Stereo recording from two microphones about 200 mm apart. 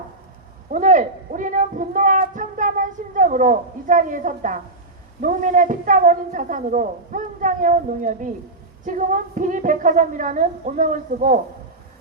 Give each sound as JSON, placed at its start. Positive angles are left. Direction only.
{"t": 0.7, "sound": "a woman's voice", "side_deg": -40}